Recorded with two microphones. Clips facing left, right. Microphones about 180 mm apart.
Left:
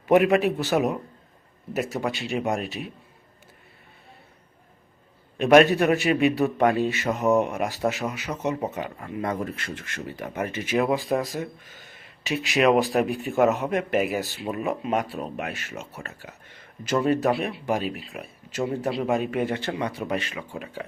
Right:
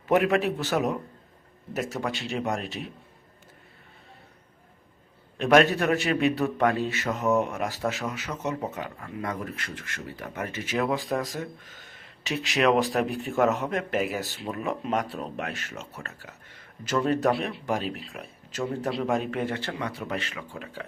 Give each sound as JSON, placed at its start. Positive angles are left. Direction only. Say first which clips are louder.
{"t": 0.1, "sound": "a man's voice", "louder": "left 4 dB", "side_deg": 15}
{"t": 5.4, "sound": "a man's voice", "louder": "left 4 dB", "side_deg": 15}